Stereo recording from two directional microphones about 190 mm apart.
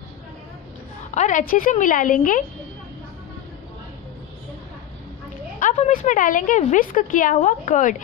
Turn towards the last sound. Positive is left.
turn(degrees=40)  # may be behind; listen again after turning